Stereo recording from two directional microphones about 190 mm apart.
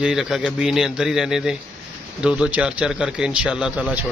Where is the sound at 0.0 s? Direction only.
5° right (ahead or behind).